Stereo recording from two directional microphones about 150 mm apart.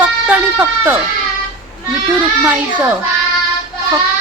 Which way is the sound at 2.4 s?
10° right (ahead or behind).